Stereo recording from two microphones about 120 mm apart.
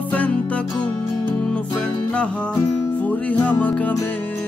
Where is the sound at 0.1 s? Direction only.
10° left (ahead or behind).